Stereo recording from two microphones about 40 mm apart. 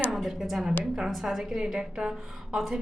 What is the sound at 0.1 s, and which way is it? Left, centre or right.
A woman's voice, centre.